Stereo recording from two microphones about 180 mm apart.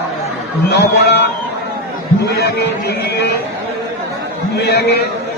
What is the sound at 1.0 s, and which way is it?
Speech, 70° left (ahead or behind).